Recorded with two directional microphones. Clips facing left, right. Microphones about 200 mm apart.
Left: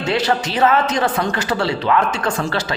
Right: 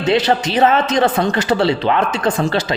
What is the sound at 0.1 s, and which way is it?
A man's voice, 20° right (ahead or behind).